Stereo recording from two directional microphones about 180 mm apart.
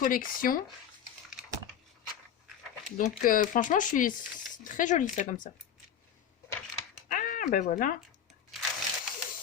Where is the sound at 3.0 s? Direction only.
50° left (ahead or behind).